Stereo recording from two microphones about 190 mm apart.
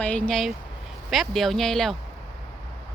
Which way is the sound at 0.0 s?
5° left (ahead or behind).